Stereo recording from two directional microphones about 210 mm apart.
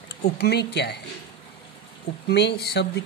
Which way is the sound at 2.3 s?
50° left (ahead or behind).